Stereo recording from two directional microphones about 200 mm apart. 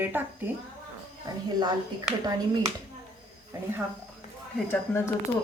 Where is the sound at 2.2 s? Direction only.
20° right (ahead or behind).